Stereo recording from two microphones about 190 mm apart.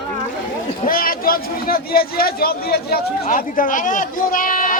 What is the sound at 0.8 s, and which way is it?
A man's voice, 50° left (ahead or behind).